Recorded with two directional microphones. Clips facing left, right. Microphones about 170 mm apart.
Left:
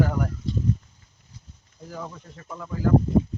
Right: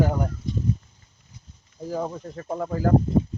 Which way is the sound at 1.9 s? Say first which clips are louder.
Right 8 dB; 40° right (ahead or behind).